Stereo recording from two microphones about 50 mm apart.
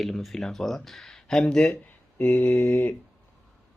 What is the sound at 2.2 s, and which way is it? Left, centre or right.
Mantra, left.